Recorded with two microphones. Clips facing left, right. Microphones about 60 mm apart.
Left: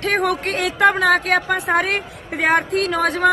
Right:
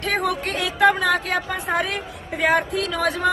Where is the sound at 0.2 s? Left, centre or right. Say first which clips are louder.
Left 4 dB; left.